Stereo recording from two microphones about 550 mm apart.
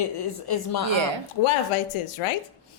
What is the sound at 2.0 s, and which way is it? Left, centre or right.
Speech, left.